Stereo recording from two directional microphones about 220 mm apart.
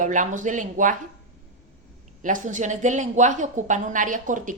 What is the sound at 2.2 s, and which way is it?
Speech, 35° right (ahead or behind).